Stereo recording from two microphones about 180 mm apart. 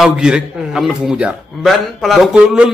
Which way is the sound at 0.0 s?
5° right (ahead or behind).